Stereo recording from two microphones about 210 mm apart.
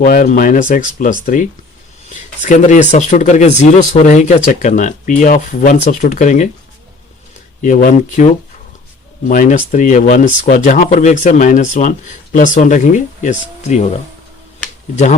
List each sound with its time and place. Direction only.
0.0 s speech: 40° left (ahead or behind)
7.6 s speech: 40° left (ahead or behind)
9.3 s speech: 40° left (ahead or behind)